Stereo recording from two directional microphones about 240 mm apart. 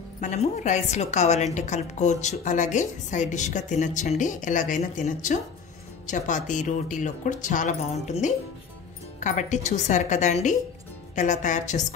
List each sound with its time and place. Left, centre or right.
0.2 s a woman's voice: left